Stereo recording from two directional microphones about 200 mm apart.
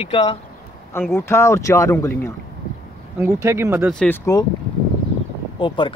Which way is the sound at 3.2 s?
15° right (ahead or behind).